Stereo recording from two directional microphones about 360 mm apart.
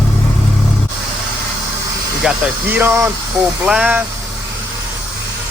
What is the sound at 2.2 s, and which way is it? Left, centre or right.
Speech, centre.